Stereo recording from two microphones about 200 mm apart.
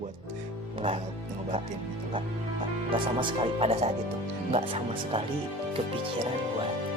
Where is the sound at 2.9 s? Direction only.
25° right (ahead or behind).